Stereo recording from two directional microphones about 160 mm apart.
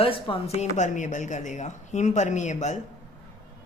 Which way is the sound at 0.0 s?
35° left (ahead or behind).